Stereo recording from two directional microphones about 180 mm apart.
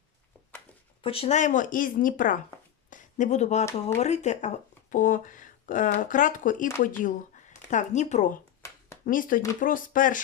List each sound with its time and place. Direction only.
1.0 s speech: 30° left (ahead or behind)
8.6 s a sound: 15° left (ahead or behind)
9.0 s speech: 50° left (ahead or behind)